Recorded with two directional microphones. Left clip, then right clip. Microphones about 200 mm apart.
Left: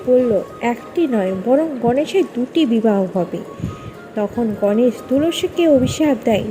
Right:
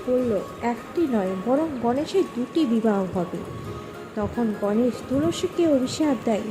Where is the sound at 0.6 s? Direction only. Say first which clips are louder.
Left 6 dB; 10° left (ahead or behind).